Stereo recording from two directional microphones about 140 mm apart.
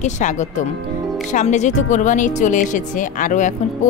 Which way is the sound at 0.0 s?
60° left (ahead or behind).